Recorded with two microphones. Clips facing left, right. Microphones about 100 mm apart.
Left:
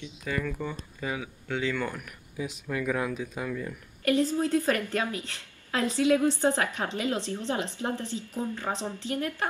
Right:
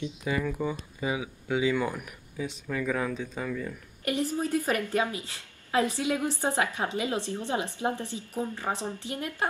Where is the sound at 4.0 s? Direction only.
15° right (ahead or behind).